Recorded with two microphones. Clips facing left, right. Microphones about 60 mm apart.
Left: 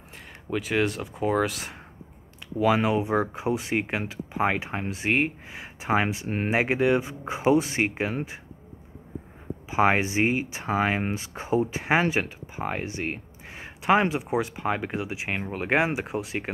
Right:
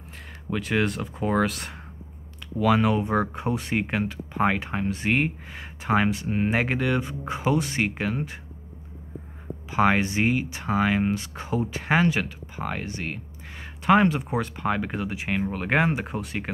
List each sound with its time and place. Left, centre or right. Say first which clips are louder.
0.5 s speech: even; centre
2.6 s speech: right 1 dB; centre
9.7 s speech: even; centre